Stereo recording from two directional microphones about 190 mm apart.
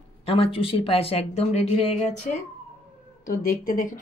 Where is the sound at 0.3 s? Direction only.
30° left (ahead or behind).